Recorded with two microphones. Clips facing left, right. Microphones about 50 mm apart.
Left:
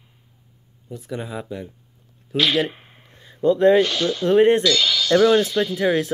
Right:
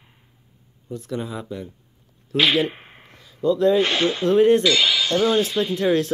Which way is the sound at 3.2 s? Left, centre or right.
Left.